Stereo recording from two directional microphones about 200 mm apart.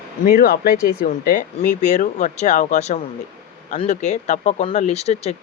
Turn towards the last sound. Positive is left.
turn(degrees=30)  # may be behind; listen again after turning